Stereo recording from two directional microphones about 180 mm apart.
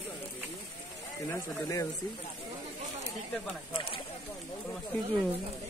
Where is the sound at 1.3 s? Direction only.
15° left (ahead or behind).